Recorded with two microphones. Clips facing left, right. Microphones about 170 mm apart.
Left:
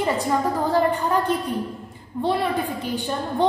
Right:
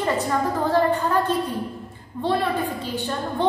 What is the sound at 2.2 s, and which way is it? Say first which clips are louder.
Speech: left 2 dB; 15° left (ahead or behind).